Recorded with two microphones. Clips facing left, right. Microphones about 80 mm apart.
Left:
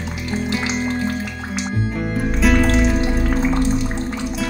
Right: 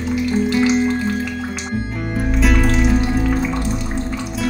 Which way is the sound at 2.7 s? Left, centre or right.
Left.